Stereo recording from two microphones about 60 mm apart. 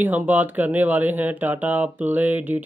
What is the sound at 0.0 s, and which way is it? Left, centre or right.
Speech, right.